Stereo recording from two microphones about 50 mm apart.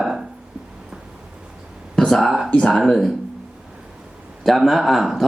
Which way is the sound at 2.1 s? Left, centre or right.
Centre.